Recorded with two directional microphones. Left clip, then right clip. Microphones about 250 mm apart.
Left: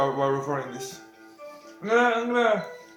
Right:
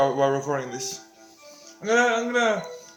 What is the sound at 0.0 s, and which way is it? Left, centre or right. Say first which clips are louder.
Speech: right 3 dB; right.